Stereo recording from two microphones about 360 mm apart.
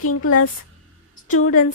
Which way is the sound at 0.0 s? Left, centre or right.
Left.